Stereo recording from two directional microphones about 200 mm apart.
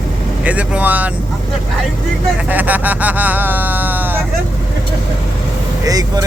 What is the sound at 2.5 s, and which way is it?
Speech, 10° right (ahead or behind).